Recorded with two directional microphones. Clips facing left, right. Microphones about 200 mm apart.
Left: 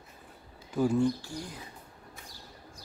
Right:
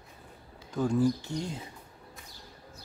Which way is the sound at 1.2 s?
25° right (ahead or behind).